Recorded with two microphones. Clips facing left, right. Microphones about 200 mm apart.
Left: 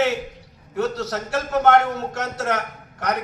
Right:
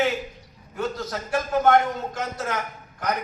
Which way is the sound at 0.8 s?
75° left (ahead or behind).